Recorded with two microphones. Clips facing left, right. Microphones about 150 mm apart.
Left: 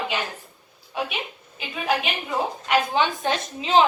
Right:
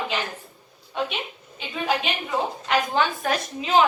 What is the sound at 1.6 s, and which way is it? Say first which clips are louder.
Speech: even; centre (ahead or behind).